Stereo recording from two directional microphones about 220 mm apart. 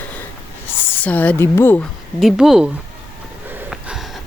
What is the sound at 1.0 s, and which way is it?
A woman's voice, 5° left (ahead or behind).